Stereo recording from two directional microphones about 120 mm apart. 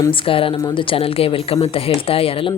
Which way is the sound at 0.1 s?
50° left (ahead or behind).